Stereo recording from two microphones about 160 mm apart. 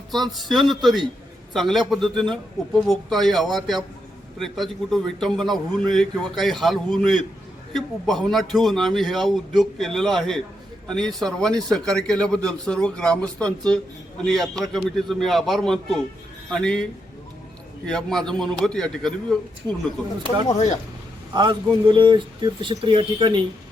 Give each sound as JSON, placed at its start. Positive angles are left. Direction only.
{"t": 0.1, "sound": "a man's voice", "side_deg": 0}
{"t": 19.6, "sound": "speech", "side_deg": 15}
{"t": 21.3, "sound": "speech", "side_deg": -30}